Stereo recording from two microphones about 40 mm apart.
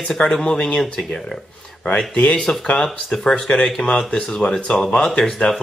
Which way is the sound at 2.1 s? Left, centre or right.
Left.